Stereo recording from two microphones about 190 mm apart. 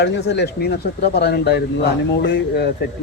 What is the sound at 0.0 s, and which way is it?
Speech, 65° left (ahead or behind).